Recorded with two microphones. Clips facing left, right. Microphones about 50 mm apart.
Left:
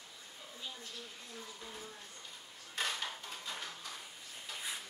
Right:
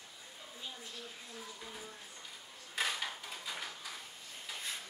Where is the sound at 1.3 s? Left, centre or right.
Centre.